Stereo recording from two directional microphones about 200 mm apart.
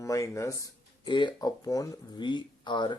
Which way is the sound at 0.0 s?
15° left (ahead or behind).